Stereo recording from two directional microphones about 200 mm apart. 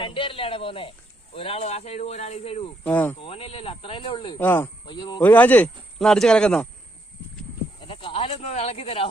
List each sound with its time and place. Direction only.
0.0 s speech: 25° left (ahead or behind)
2.8 s speech: 10° left (ahead or behind)
3.2 s speech: 25° left (ahead or behind)
4.4 s speech: 10° left (ahead or behind)
4.9 s speech: 20° left (ahead or behind)
5.2 s speech: 10° left (ahead or behind)
7.8 s speech: 25° left (ahead or behind)